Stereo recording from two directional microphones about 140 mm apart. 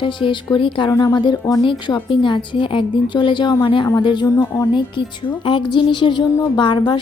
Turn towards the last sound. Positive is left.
turn(degrees=35)  # may be behind; listen again after turning